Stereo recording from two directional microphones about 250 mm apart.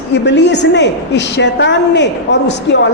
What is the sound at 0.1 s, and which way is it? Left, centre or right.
A woman's voice, left.